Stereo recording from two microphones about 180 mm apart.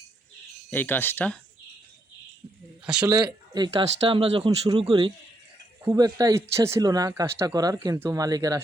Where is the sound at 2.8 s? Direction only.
5° right (ahead or behind).